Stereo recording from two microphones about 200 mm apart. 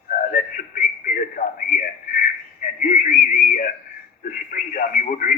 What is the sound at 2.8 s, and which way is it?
Speech, 40° left (ahead or behind).